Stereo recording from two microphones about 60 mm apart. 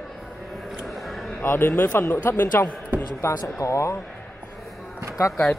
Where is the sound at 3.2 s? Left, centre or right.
Left.